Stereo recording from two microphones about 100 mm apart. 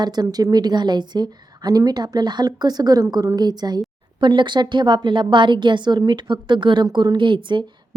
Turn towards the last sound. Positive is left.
turn(degrees=-55)  # may be behind; listen again after turning